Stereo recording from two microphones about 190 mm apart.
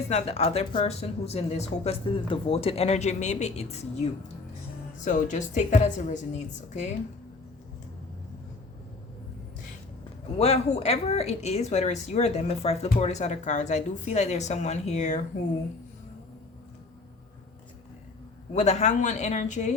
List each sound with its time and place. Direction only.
0.1 s speech: 35° left (ahead or behind)
10.3 s speech: 35° left (ahead or behind)
18.5 s speech: 35° left (ahead or behind)